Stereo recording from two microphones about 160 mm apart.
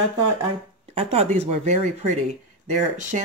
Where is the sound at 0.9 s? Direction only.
40° right (ahead or behind).